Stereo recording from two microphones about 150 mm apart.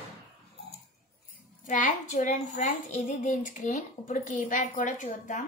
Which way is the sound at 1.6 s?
60° left (ahead or behind).